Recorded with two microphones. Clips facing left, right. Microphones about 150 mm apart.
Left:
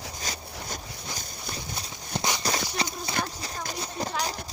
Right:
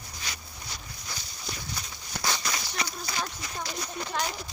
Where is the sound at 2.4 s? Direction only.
30° left (ahead or behind).